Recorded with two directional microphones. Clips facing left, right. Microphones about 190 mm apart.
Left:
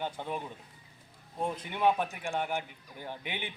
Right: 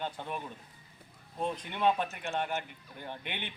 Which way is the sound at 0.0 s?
15° left (ahead or behind).